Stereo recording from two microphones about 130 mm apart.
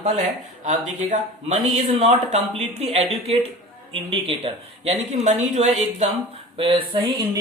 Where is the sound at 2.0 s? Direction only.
55° right (ahead or behind).